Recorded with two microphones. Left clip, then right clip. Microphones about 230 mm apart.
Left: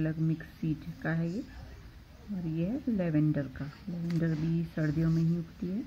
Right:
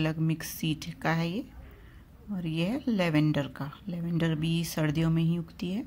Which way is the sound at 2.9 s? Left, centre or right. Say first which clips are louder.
Right 4 dB; right.